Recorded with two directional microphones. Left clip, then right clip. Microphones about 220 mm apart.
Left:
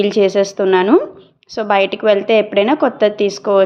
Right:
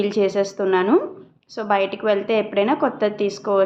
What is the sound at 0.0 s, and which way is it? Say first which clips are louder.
A woman's voice: left 6 dB; 35° left (ahead or behind).